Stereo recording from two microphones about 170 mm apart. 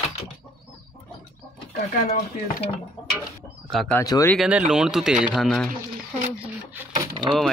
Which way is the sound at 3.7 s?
5° left (ahead or behind).